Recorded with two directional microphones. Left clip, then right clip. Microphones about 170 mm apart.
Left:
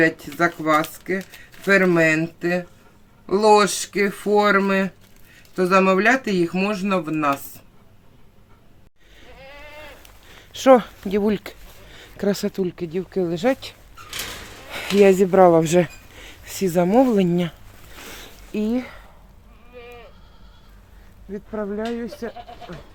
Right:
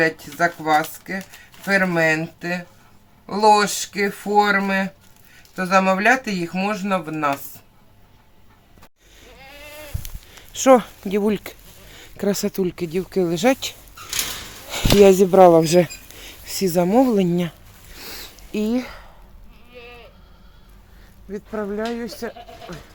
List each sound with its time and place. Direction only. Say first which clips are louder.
0.0 s speech: even; 15° right (ahead or behind)
10.3 s speech: even; centre (ahead or behind); by 13.7 s 20° right (ahead or behind)
14.7 s a sound: right 3 dB; 15° right (ahead or behind)
15.2 s speech: right 2 dB; 5° right (ahead or behind)
17.9 s zipper: right 2 dB; centre (ahead or behind)
21.3 s speech: right 1 dB; 5° left (ahead or behind)